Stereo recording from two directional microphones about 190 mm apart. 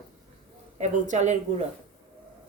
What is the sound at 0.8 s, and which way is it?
Speech, 40° right (ahead or behind).